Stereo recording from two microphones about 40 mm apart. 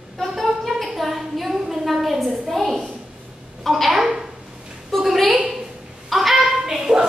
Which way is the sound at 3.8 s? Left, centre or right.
Centre.